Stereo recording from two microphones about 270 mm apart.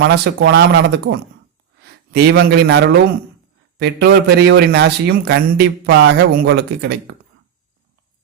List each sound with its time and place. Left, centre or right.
0.0 s a man's voice: right